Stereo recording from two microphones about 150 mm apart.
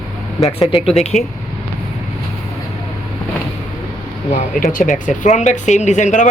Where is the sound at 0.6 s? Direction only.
40° left (ahead or behind).